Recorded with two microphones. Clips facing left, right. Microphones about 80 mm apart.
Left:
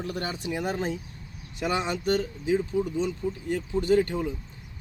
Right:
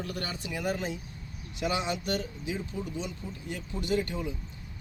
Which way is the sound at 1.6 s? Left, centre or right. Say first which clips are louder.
Left 4 dB; left.